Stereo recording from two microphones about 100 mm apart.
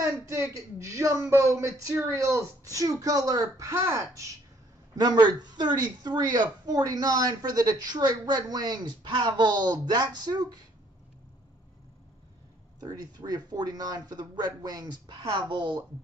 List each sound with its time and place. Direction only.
0.0 s speech: 30° right (ahead or behind)
4.9 s a woman's voice: 40° right (ahead or behind)
12.8 s a woman's voice: 40° right (ahead or behind)